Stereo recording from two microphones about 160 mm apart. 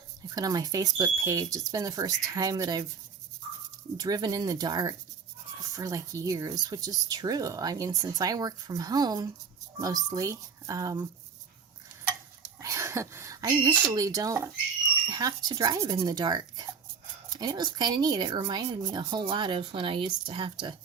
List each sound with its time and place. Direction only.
0.3 s speech: 25° right (ahead or behind)
3.9 s speech: 25° right (ahead or behind)
12.5 s speech: 20° right (ahead or behind)